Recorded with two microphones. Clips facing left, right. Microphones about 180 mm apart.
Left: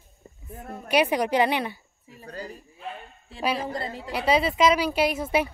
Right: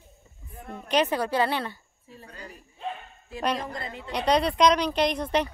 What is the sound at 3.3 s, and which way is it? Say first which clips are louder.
Speech: left 1 dB; 5° left (ahead or behind).